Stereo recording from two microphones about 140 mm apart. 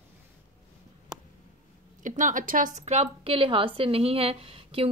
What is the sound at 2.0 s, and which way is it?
A woman's voice, 65° right (ahead or behind).